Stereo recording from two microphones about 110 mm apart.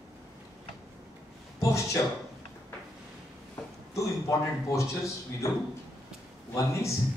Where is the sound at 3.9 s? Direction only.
30° left (ahead or behind).